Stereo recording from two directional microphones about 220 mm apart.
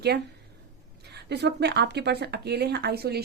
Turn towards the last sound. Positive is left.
turn(degrees=-45)  # may be behind; listen again after turning